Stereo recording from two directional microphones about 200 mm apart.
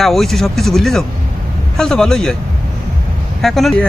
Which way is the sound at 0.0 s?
Centre (ahead or behind).